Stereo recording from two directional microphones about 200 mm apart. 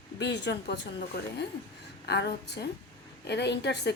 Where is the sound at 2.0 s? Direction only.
55° left (ahead or behind).